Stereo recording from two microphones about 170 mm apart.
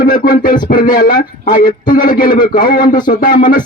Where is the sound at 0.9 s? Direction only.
55° left (ahead or behind).